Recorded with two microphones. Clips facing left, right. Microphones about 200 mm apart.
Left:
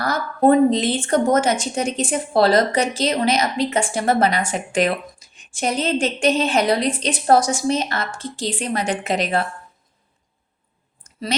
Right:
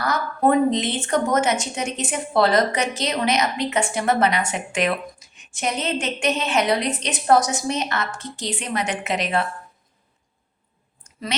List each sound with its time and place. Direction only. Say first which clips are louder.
0.0 s a woman's voice: left 3 dB; 30° left (ahead or behind)